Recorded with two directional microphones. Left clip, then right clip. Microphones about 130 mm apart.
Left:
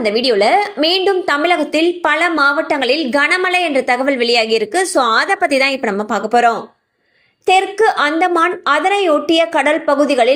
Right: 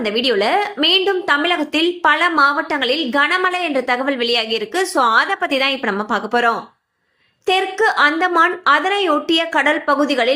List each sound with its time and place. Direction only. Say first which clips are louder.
0.0 s a woman's voice: left 4 dB; 20° left (ahead or behind)